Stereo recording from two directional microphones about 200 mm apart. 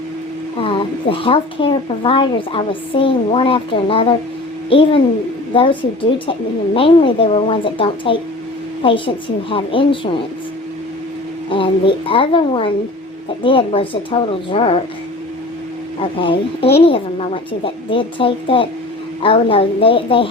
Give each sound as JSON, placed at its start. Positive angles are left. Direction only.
{"t": 0.5, "sound": "speech", "side_deg": 25}
{"t": 11.4, "sound": "speech", "side_deg": 25}
{"t": 16.0, "sound": "speech", "side_deg": 25}